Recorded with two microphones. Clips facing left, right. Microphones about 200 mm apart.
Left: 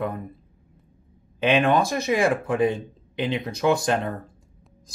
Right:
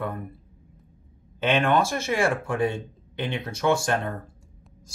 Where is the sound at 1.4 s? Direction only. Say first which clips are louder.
Left 2 dB; 15° left (ahead or behind).